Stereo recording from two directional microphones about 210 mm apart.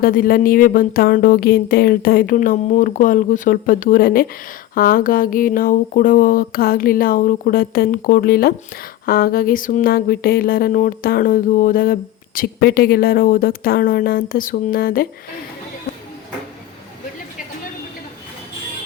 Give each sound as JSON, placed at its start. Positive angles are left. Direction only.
{"t": 0.0, "sound": "speech", "side_deg": 45}